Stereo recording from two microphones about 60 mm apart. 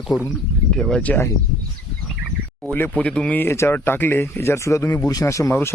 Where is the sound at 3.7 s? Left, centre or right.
Left.